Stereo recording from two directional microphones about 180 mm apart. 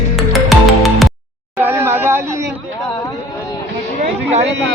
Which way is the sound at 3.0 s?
20° left (ahead or behind).